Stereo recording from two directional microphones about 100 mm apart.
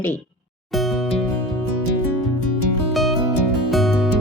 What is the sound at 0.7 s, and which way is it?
Music, centre (ahead or behind).